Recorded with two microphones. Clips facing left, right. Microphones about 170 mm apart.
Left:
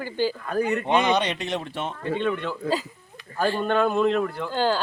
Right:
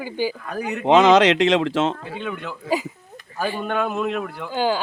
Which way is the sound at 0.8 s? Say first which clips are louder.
Right 13 dB; 90° right.